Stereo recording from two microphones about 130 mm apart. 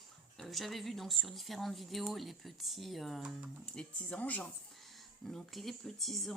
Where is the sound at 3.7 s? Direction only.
10° left (ahead or behind).